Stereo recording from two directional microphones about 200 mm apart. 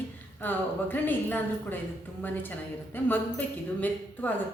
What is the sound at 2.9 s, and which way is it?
A woman's voice, 10° left (ahead or behind).